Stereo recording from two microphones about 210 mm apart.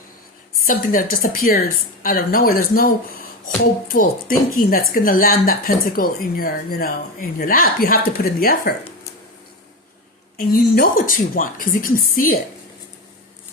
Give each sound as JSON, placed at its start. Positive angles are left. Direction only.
{"t": 0.7, "sound": "a woman's voice", "side_deg": 40}
{"t": 10.3, "sound": "speech", "side_deg": 45}